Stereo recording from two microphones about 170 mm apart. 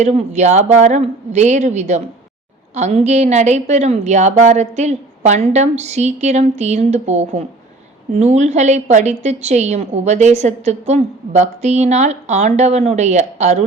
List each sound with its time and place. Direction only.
0.0 s a woman's voice: 40° right (ahead or behind)